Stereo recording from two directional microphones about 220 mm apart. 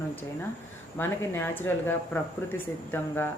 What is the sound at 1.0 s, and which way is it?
Speech, 10° left (ahead or behind).